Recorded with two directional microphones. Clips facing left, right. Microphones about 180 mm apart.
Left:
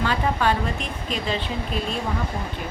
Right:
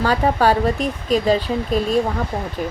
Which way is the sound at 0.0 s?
40° right (ahead or behind).